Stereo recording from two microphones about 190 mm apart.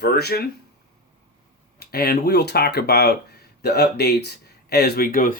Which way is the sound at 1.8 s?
55° left (ahead or behind).